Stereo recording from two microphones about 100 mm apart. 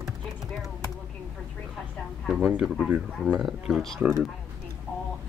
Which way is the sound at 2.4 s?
10° right (ahead or behind).